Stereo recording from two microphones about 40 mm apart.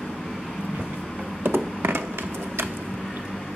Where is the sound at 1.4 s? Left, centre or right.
Right.